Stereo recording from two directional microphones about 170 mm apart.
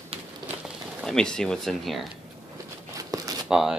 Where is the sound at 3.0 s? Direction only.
20° right (ahead or behind).